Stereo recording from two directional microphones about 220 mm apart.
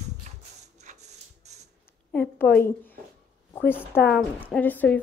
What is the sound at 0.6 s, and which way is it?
Printer, 30° right (ahead or behind).